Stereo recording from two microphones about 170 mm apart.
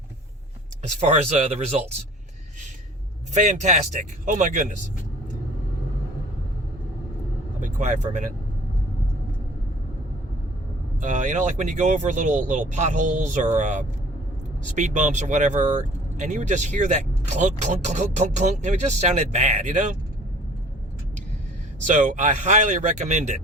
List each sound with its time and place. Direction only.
0.8 s speech: 45° right (ahead or behind)
3.3 s speech: 45° right (ahead or behind)
7.6 s speech: 45° right (ahead or behind)
11.0 s speech: 45° right (ahead or behind)
21.8 s speech: 50° right (ahead or behind)